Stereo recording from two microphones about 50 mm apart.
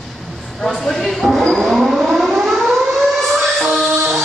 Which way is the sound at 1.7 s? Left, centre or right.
Centre.